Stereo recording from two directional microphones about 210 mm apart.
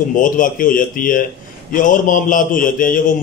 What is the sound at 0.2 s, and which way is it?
Speech, 40° left (ahead or behind).